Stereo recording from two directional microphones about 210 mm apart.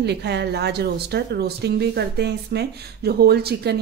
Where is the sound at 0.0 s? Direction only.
50° right (ahead or behind).